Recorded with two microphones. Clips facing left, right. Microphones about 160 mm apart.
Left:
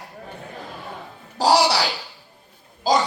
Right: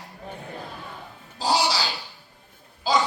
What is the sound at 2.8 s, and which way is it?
Speech, 40° left (ahead or behind).